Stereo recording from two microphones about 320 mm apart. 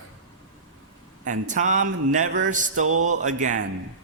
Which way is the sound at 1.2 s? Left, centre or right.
Right.